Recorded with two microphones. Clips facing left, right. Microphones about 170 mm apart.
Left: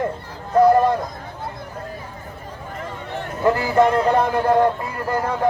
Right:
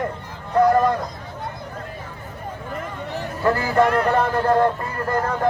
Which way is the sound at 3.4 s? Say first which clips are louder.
Left 2 dB; 20° left (ahead or behind).